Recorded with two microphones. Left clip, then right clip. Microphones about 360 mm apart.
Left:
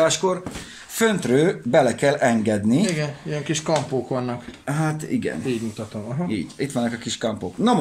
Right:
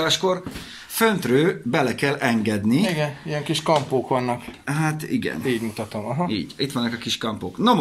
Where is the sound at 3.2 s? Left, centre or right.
Right.